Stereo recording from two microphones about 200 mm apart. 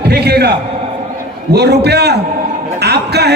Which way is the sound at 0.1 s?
55° right (ahead or behind).